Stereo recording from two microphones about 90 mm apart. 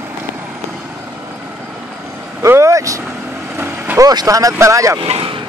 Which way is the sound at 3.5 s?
20° right (ahead or behind).